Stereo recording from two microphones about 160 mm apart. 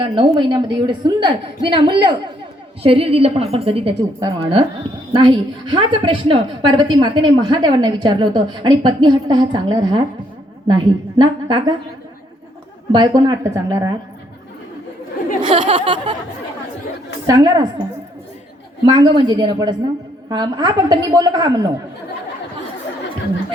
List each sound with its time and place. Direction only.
0.0 s a woman's voice: 30° right (ahead or behind)
12.9 s a woman's voice: 25° right (ahead or behind)
15.4 s a sound: 35° right (ahead or behind)
17.2 s a woman's voice: 25° right (ahead or behind)
18.9 s a woman's voice: 30° right (ahead or behind)